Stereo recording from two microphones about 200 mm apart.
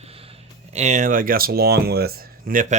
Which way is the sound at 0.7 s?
35° right (ahead or behind).